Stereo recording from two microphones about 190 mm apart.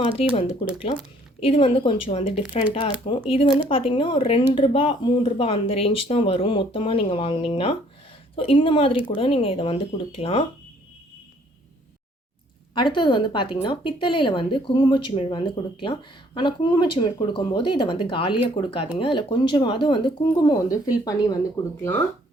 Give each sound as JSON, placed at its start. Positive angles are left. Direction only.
{"t": 1.4, "sound": "speech", "side_deg": 30}
{"t": 12.7, "sound": "speech", "side_deg": 25}